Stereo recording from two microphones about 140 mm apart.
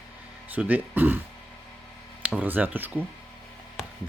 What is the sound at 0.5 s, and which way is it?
Speech, 10° right (ahead or behind).